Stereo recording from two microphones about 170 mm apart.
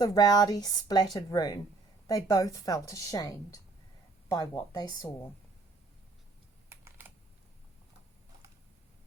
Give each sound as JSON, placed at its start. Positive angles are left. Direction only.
{"t": 0.0, "sound": "a woman's voice", "side_deg": 20}
{"t": 6.7, "sound": "typing", "side_deg": -15}